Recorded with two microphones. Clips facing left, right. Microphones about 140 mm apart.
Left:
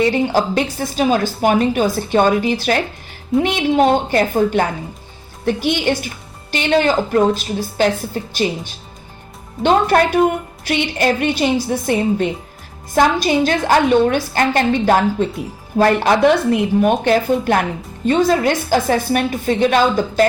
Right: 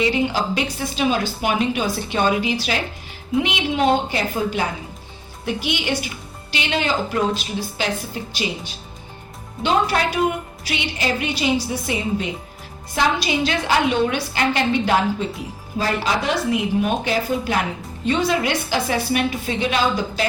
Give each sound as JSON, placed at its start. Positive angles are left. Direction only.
{"t": 0.0, "sound": "speech", "side_deg": 45}
{"t": 9.6, "sound": "speech", "side_deg": 50}